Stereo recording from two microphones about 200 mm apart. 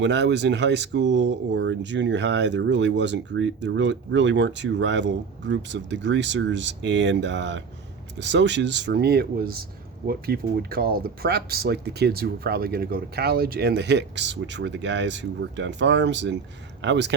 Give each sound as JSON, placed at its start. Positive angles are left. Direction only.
{"t": 0.0, "sound": "speech", "side_deg": -60}